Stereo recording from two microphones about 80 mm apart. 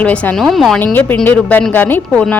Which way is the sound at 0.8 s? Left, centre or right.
Left.